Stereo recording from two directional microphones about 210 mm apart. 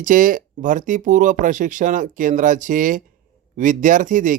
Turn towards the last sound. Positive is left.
turn(degrees=-40)  # may be behind; listen again after turning